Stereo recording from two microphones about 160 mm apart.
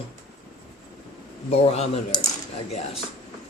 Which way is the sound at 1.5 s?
40° left (ahead or behind).